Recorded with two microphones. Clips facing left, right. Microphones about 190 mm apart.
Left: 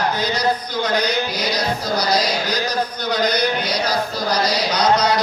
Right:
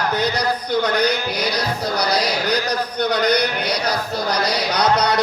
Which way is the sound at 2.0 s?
60° right (ahead or behind).